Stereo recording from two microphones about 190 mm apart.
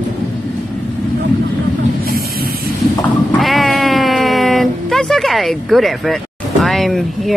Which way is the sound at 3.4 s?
Centre (ahead or behind).